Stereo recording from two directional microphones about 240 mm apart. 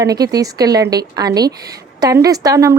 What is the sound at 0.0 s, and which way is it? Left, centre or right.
A woman's voice, centre.